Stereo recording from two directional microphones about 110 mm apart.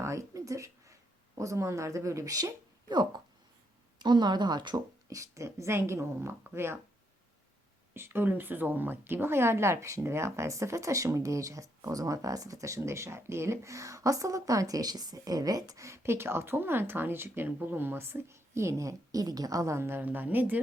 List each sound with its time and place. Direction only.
0.0 s a sound: 25° right (ahead or behind)
1.4 s speech: 30° right (ahead or behind)
5.0 s speech: 30° right (ahead or behind)
7.9 s speech: 20° right (ahead or behind)